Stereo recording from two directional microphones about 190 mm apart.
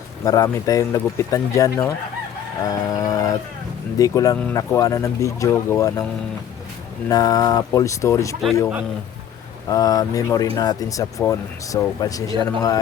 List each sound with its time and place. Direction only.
0.3 s speech: 20° left (ahead or behind)
2.6 s a sound: 20° left (ahead or behind)
3.9 s speech: 20° left (ahead or behind)
7.1 s speech: 20° left (ahead or behind)
9.6 s speech: 20° left (ahead or behind)